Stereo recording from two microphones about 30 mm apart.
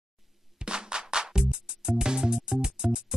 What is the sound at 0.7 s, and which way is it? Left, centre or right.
Music, right.